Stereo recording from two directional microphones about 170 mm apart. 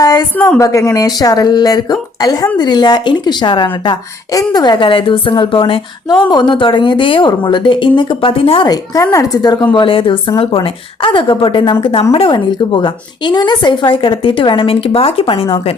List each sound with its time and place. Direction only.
0.0 s a woman's voice: 20° left (ahead or behind)
0.3 s a woman's voice: 10° left (ahead or behind)
0.7 s a woman's voice: 20° left (ahead or behind)